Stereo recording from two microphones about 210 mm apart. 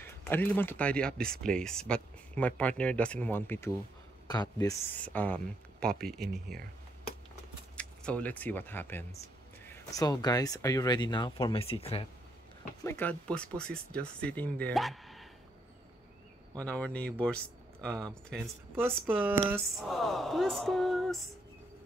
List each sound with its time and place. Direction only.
0.0 s speech: 10° left (ahead or behind)
7.7 s speech: 5° left (ahead or behind); by 12.1 s 25° left (ahead or behind)
12.8 s speech: 10° left (ahead or behind)
16.5 s speech: 5° left (ahead or behind)
18.8 s speech: 10° right (ahead or behind)